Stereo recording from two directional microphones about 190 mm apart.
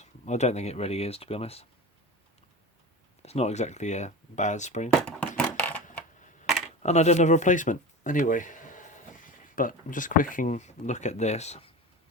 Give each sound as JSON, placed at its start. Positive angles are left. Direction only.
{"t": 0.0, "sound": "speech", "side_deg": 35}
{"t": 3.2, "sound": "speech", "side_deg": 35}
{"t": 4.9, "sound": "a sound", "side_deg": 5}
{"t": 6.8, "sound": "speech", "side_deg": 35}